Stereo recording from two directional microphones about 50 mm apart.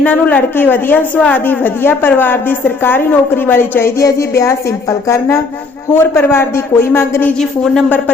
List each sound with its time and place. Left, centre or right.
0.0 s speech: left
1.1 s a woman's voice: left
1.5 s a woman's voice: left
4.0 s a woman's voice: left
5.9 s a woman's voice: left
7.9 s speech: left